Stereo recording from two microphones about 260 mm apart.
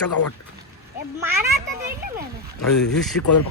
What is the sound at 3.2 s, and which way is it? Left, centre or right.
Speech, left.